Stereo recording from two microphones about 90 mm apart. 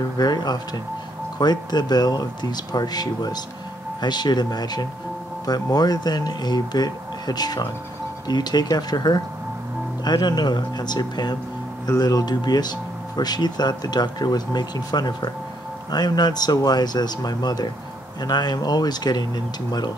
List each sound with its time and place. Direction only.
0.2 s speech: 50° left (ahead or behind)